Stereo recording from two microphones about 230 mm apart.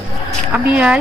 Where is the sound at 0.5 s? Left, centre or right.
Centre.